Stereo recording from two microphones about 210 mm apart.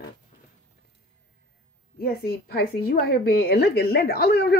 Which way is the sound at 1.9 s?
45° left (ahead or behind).